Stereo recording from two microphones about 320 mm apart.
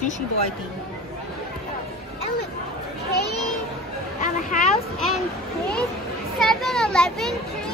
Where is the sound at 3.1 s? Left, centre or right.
Left.